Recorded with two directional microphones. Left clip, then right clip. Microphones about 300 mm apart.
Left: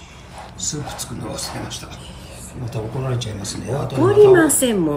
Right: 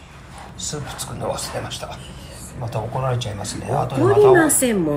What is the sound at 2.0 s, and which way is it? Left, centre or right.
Vehicle, centre.